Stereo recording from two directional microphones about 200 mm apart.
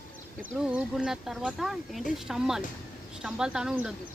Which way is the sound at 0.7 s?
5° right (ahead or behind).